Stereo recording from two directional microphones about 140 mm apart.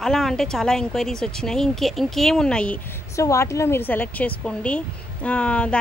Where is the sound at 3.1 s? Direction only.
20° left (ahead or behind).